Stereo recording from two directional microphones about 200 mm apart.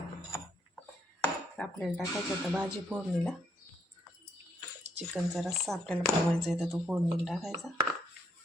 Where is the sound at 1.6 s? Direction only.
5° left (ahead or behind).